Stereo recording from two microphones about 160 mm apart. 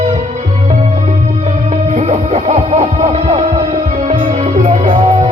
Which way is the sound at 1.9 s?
45° right (ahead or behind).